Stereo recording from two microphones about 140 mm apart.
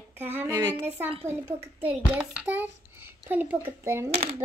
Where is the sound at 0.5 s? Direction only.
30° right (ahead or behind).